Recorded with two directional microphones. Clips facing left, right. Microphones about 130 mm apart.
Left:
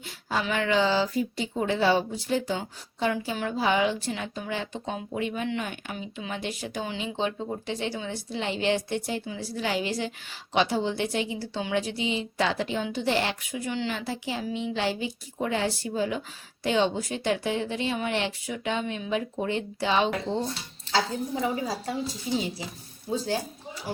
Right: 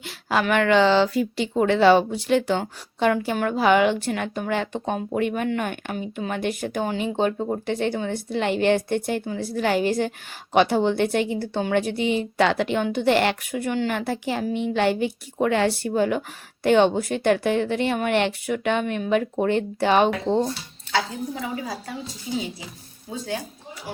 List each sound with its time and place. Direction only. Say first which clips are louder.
0.0 s speech: right 6 dB; 80° right; by 20.4 s 55° right (ahead or behind)